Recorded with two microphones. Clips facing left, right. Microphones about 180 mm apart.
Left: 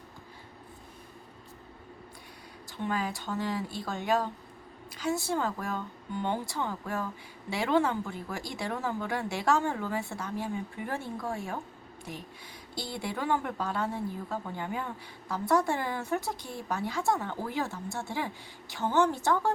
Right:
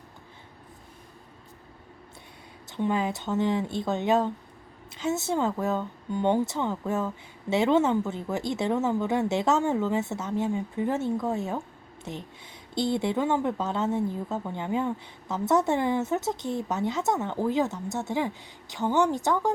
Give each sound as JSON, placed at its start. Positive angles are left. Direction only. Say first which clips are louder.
{"t": 2.8, "sound": "a woman's voice", "louder": "right 5 dB", "side_deg": -20}